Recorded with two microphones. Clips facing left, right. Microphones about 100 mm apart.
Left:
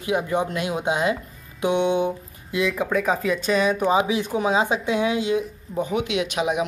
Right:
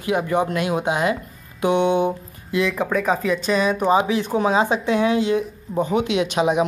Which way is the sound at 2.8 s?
40° right (ahead or behind).